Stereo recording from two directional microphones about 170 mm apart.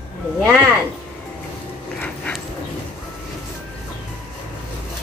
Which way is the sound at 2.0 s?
10° left (ahead or behind).